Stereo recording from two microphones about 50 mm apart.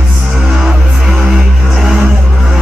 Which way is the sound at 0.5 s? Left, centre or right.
Centre.